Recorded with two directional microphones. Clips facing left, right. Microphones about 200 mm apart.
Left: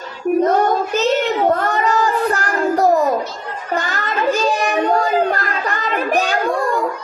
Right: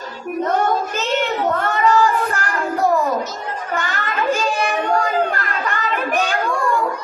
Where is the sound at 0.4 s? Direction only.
40° left (ahead or behind).